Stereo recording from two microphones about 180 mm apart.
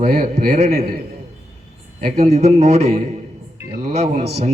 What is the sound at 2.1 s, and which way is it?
Speech, 35° right (ahead or behind).